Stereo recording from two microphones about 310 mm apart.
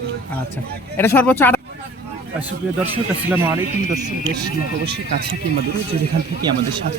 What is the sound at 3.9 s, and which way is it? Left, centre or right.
Speech, centre.